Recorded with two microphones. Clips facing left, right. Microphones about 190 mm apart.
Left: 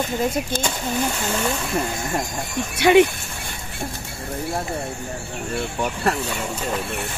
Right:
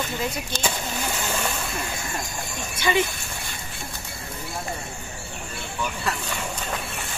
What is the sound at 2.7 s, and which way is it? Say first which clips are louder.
Speech: left 9 dB; 65° left (ahead or behind).